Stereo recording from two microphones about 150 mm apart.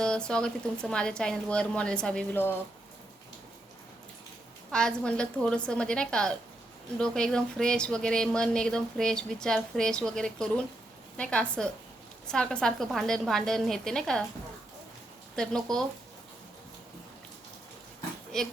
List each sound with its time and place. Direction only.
0.0 s speech: 5° left (ahead or behind)
4.7 s a woman's voice: 5° left (ahead or behind)
15.4 s speech: 5° left (ahead or behind)
18.3 s speech: 5° left (ahead or behind)